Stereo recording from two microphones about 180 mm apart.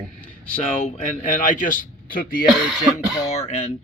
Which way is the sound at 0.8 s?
45° left (ahead or behind).